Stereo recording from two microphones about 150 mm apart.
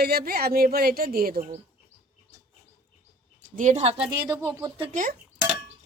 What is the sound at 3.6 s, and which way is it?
Speech, 55° right (ahead or behind).